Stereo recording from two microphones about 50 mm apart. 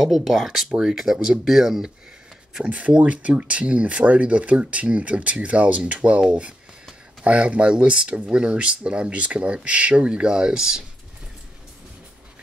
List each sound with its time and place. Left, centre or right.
0.0 s speech: centre
2.6 s speech: right
7.2 s speech: right